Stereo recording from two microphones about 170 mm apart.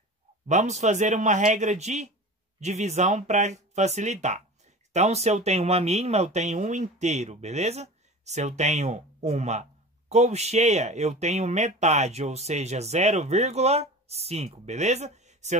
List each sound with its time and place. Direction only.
0.5 s speech: 45° right (ahead or behind)